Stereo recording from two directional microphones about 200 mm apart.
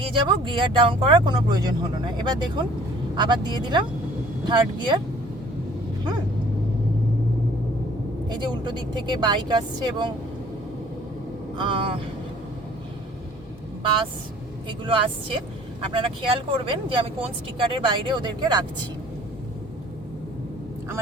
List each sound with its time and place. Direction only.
0.0 s speech: 25° right (ahead or behind)
8.3 s speech: 20° right (ahead or behind)
11.5 s speech: 25° right (ahead or behind)
14.7 s speech: 25° right (ahead or behind)